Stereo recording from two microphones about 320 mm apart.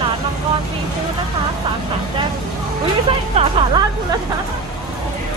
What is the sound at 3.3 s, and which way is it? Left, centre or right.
Music, centre.